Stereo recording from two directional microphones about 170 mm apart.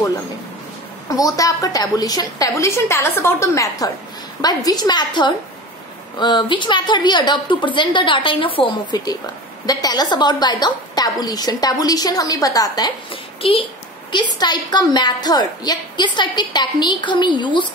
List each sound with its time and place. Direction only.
1.0 s a woman's voice: 20° left (ahead or behind)